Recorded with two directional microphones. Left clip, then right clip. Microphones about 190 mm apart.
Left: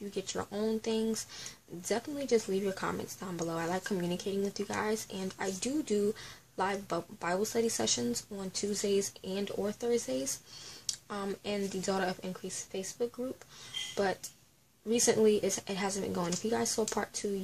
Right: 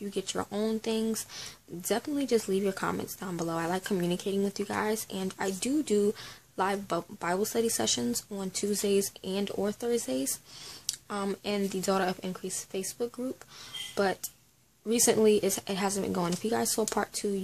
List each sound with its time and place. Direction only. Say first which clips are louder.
0.1 s speech: right 4 dB; 25° right (ahead or behind)